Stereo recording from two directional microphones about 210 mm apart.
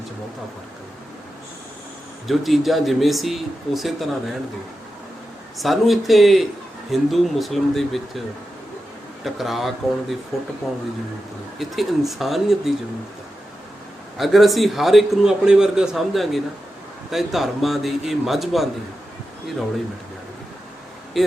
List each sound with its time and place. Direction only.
2.2 s a man's voice: centre (ahead or behind)
5.5 s a man's voice: centre (ahead or behind)
9.2 s a man's voice: centre (ahead or behind)
14.2 s a man's voice: centre (ahead or behind)
21.2 s speech: centre (ahead or behind)